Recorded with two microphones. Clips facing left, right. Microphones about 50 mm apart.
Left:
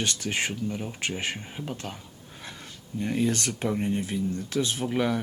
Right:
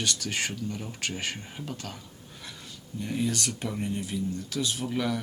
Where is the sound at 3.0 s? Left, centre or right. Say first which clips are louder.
Left 3 dB; left.